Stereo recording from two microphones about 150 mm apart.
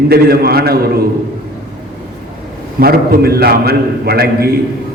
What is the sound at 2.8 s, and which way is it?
A man's voice, 90° right.